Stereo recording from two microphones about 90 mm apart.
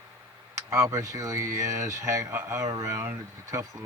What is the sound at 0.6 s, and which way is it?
Speech, 35° right (ahead or behind).